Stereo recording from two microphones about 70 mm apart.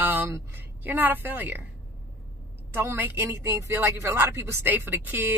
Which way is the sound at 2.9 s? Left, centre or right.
Right.